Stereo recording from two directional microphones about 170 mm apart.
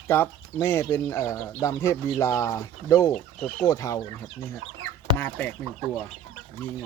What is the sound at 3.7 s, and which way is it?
Speech, 20° left (ahead or behind).